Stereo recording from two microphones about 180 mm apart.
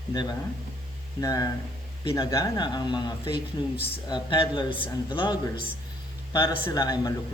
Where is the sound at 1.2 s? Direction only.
20° left (ahead or behind).